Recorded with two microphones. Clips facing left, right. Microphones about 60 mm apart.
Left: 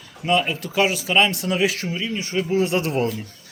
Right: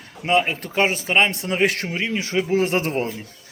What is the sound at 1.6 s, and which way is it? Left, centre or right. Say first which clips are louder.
Speech: right 2 dB; right.